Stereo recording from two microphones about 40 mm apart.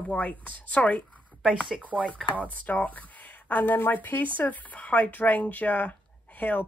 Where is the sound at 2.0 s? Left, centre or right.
Left.